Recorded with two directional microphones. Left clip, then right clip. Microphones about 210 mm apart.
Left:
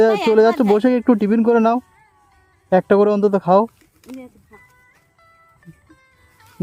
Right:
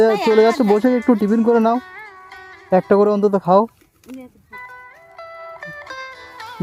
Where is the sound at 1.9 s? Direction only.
55° right (ahead or behind).